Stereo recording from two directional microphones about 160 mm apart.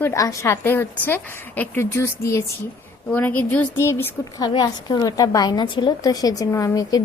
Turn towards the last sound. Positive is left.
turn(degrees=20)  # may be behind; listen again after turning